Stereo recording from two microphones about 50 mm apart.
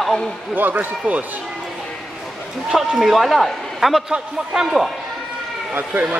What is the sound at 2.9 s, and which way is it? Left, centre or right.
Speech, centre.